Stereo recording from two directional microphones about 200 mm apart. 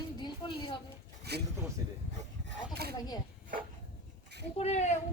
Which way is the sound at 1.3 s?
55° right (ahead or behind).